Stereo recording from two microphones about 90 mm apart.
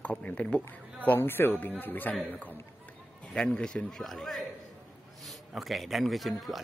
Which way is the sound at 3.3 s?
10° left (ahead or behind).